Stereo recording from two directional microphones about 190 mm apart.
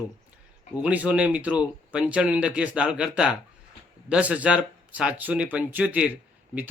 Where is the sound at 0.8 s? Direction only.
5° right (ahead or behind).